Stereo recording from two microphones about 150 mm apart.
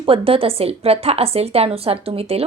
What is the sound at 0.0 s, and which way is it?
A woman's voice, 40° right (ahead or behind).